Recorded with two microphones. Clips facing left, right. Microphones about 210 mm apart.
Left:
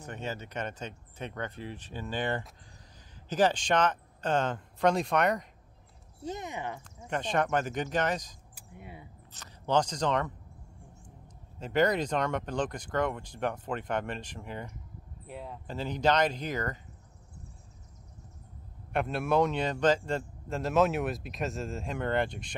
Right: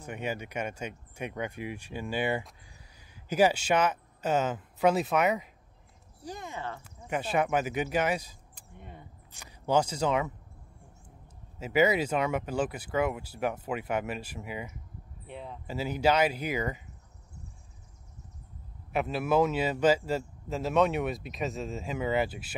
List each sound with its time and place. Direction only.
0.0 s speech: 10° right (ahead or behind)
6.2 s speech: 20° left (ahead or behind)
6.8 s speech: 5° right (ahead or behind)
8.5 s speech: 10° left (ahead or behind)
9.3 s speech: 10° right (ahead or behind)
11.6 s speech: 5° right (ahead or behind)
15.6 s speech: 5° right (ahead or behind)
18.9 s speech: centre (ahead or behind)